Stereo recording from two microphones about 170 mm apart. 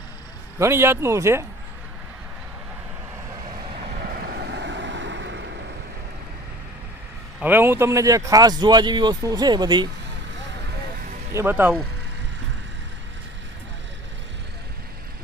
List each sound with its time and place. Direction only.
0.6 s speech: 15° right (ahead or behind)
4.0 s vehicle: 65° right (ahead or behind); by 5.4 s 90° right
7.4 s speech: 10° right (ahead or behind)
11.3 s speech: 10° right (ahead or behind)